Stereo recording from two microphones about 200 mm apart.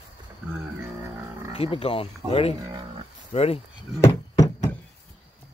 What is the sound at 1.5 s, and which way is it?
Speech, 30° left (ahead or behind).